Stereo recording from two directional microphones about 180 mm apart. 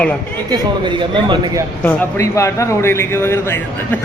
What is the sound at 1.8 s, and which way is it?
A man's voice, 15° left (ahead or behind).